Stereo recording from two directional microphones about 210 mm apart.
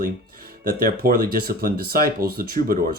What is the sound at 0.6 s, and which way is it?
Speech, 40° right (ahead or behind).